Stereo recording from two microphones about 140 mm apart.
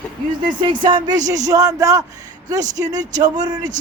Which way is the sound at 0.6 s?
35° right (ahead or behind).